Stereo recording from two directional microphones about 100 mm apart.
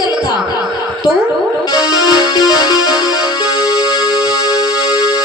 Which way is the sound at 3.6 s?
40° left (ahead or behind).